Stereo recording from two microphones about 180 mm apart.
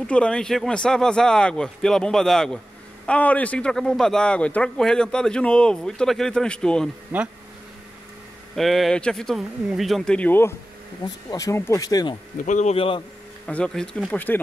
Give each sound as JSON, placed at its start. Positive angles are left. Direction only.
{"t": 0.0, "sound": "speech", "side_deg": 5}
{"t": 7.1, "sound": "speech", "side_deg": -10}
{"t": 8.5, "sound": "speech", "side_deg": 0}
{"t": 12.4, "sound": "speech", "side_deg": 45}
{"t": 13.5, "sound": "speech", "side_deg": 5}